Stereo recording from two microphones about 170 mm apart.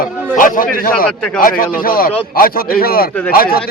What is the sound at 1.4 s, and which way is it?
A man's voice, 55° left (ahead or behind).